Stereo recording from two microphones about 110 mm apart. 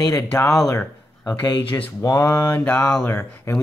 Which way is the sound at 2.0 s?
30° left (ahead or behind).